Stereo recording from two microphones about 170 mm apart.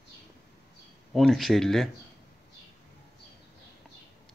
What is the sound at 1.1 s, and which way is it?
Speech, centre (ahead or behind).